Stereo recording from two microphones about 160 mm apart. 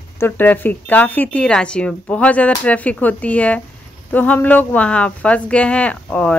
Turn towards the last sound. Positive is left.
turn(degrees=10)  # may be behind; listen again after turning